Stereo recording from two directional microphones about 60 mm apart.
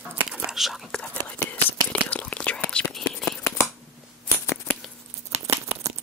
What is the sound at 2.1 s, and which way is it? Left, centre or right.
Whispering, centre.